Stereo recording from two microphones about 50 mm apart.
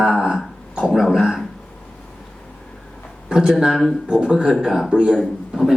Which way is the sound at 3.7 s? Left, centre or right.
Centre.